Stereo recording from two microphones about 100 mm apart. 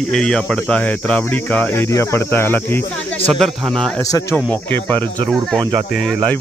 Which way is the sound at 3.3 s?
5° left (ahead or behind).